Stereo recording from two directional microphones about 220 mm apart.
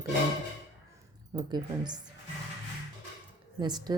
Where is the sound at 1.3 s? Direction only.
20° right (ahead or behind).